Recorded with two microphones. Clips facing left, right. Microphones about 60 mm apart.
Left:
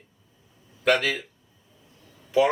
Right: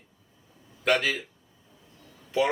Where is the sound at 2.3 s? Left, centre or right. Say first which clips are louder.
Left 4 dB; centre.